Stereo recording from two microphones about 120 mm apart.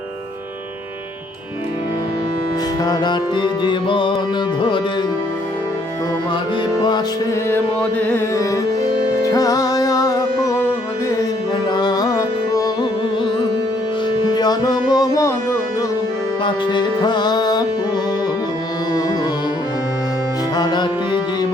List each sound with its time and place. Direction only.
2.8 s music: 35° left (ahead or behind)
6.7 s music: 35° left (ahead or behind)
7.5 s music: 15° left (ahead or behind)
8.4 s music: 30° left (ahead or behind)
11.7 s music: 35° left (ahead or behind)
14.2 s music: 35° left (ahead or behind)
16.4 s music: 40° left (ahead or behind)
20.6 s music: 35° left (ahead or behind)